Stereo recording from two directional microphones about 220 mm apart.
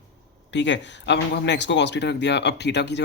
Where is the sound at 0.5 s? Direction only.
55° left (ahead or behind).